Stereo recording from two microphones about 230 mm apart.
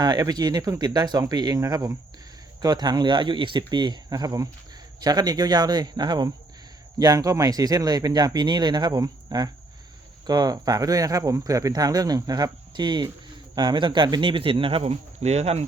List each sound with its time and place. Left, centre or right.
0.0 s speech: centre